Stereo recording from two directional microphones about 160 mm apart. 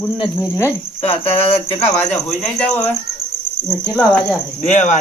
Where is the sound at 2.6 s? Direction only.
10° left (ahead or behind).